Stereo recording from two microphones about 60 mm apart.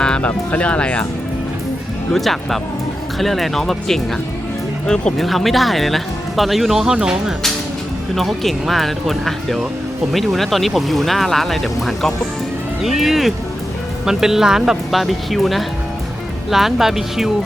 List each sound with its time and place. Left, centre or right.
0.0 s music: centre
0.3 s speech: left
2.1 s speech: centre
5.1 s speech: centre
8.1 s speech: centre